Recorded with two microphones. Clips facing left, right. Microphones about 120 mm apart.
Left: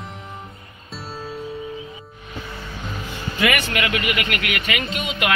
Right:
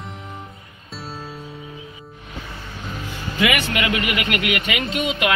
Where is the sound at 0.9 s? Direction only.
Centre (ahead or behind).